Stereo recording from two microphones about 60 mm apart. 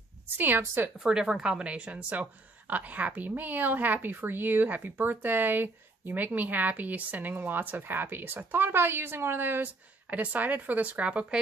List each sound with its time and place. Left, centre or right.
0.9 s a woman's voice: centre